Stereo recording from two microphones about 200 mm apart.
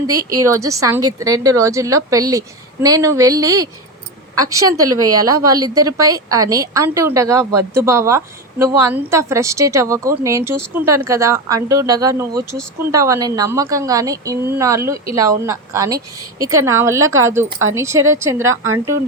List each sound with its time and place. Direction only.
0.1 s a woman's voice: 15° right (ahead or behind)